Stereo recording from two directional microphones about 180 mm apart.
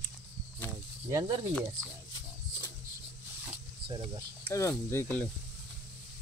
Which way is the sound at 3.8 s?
30° right (ahead or behind).